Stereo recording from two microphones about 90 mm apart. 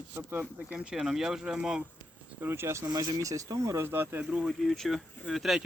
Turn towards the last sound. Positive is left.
turn(degrees=0)  # may be behind; listen again after turning